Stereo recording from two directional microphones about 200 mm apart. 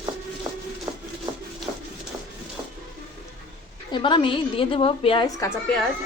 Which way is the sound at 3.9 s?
25° left (ahead or behind).